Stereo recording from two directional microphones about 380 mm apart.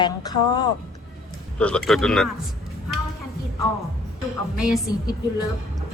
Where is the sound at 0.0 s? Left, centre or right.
Centre.